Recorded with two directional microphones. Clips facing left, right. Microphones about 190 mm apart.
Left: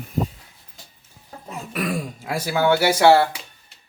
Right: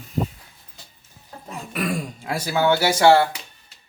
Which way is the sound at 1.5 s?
Centre (ahead or behind).